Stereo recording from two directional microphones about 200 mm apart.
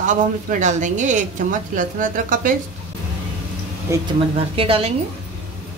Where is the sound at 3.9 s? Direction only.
15° right (ahead or behind).